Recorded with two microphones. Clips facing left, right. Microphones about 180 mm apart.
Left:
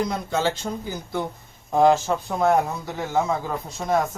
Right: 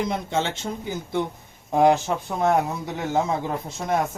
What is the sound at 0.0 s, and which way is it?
Speech, 25° right (ahead or behind).